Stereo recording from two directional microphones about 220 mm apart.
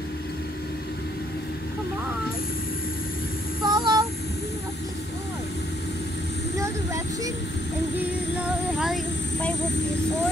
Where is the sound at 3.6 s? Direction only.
20° right (ahead or behind).